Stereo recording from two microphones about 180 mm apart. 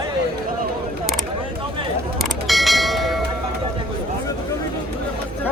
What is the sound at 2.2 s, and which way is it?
Bell, centre (ahead or behind).